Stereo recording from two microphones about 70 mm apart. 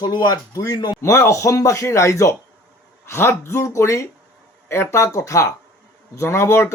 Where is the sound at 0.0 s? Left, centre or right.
Left.